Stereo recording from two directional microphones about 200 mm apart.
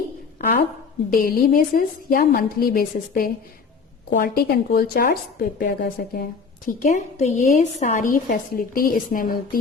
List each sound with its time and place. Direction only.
1.1 s a woman's voice: 45° left (ahead or behind)
6.7 s a woman's voice: 40° left (ahead or behind)